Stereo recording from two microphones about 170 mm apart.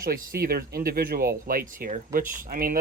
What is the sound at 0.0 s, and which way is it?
Speech, 60° right (ahead or behind).